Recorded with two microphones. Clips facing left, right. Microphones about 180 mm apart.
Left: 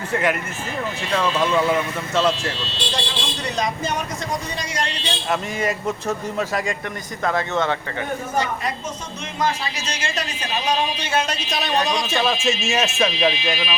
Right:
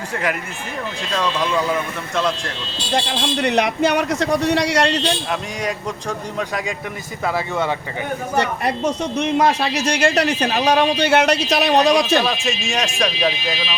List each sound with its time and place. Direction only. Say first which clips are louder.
0.1 s a man's voice: left 3 dB; centre (ahead or behind)
2.9 s a woman's voice: right 11 dB; 60° right (ahead or behind)
5.3 s a man's voice: left 1 dB; 5° left (ahead or behind)
7.3 s speech: even; 10° right (ahead or behind)
8.4 s a woman's voice: right 6 dB; 70° right (ahead or behind)
12.5 s a man's voice: left 1 dB; 5° left (ahead or behind)